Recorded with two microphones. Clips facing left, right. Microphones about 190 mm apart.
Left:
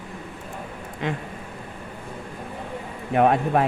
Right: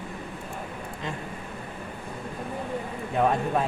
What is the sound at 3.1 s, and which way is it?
Speech, 65° left (ahead or behind).